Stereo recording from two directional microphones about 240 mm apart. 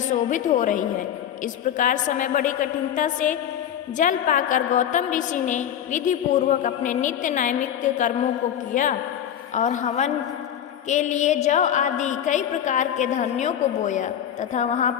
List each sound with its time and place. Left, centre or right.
0.1 s a woman's voice: left